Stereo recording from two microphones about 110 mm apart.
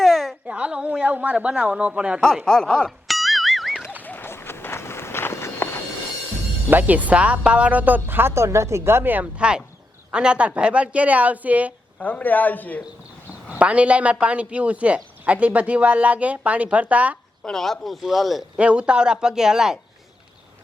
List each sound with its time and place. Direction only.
0.0 s a sound: centre (ahead or behind)
0.4 s a man's voice: 10° right (ahead or behind)
2.2 s music: 5° left (ahead or behind)
4.0 s run: 15° left (ahead or behind)
6.7 s a man's voice: 15° right (ahead or behind)
11.9 s a man's voice: 15° left (ahead or behind)
13.6 s a man's voice: 10° right (ahead or behind)
17.4 s speech: 5° left (ahead or behind)
18.6 s a man's voice: 10° right (ahead or behind)